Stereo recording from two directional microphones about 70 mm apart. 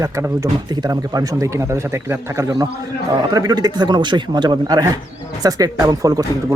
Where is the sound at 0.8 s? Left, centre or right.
Right.